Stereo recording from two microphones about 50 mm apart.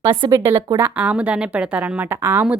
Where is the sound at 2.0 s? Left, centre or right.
Right.